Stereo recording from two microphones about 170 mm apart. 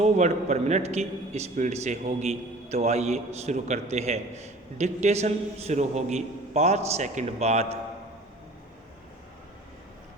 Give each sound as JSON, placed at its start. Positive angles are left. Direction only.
{"t": 0.0, "sound": "a man's voice", "side_deg": -40}